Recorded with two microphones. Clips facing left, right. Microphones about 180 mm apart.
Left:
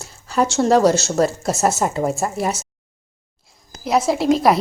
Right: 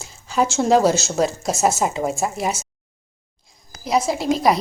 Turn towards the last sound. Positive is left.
turn(degrees=0)  # may be behind; listen again after turning